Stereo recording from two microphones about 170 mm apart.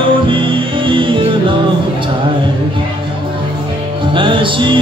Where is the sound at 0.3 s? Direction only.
30° right (ahead or behind).